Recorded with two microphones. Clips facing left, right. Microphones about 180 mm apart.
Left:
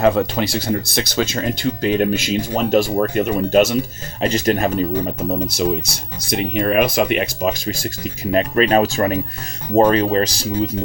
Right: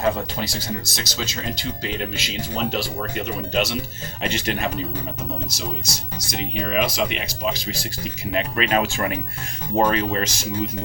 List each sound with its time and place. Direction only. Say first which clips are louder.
0.0 s speech: left 7 dB; 65° left (ahead or behind); by 4.7 s 40° left (ahead or behind)
5.5 s speech: left 10 dB; 55° left (ahead or behind); by 10.7 s 35° left (ahead or behind)